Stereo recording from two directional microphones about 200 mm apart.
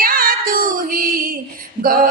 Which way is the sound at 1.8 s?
45° right (ahead or behind).